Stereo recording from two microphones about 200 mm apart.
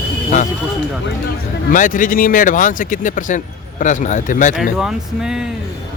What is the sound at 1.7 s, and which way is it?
Speech, 40° left (ahead or behind).